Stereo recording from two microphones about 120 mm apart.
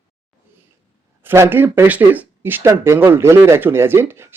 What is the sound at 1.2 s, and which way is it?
Speech, 20° right (ahead or behind).